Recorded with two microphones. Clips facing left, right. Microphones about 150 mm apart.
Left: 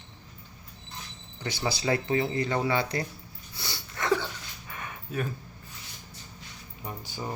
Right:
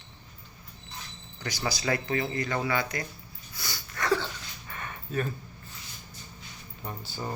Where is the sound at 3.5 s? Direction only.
30° left (ahead or behind).